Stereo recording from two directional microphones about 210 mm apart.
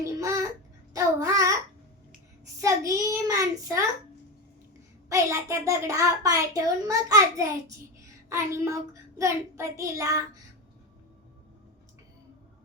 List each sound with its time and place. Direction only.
0.0 s babbling: 15° right (ahead or behind)
2.6 s a child's voice: 15° right (ahead or behind)
5.0 s a child's voice: 15° right (ahead or behind)